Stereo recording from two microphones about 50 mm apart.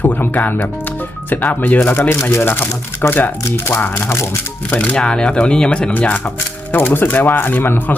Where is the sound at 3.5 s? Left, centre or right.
Left.